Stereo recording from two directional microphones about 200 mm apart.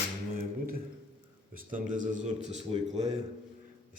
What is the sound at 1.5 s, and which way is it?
Speech, 40° right (ahead or behind).